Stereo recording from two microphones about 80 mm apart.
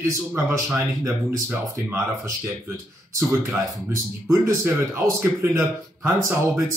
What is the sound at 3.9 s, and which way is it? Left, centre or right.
A man's voice, right.